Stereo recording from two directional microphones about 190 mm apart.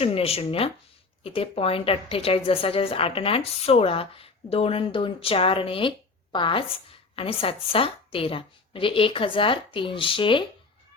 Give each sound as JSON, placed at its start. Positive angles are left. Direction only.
{"t": 0.0, "sound": "a woman's voice", "side_deg": 30}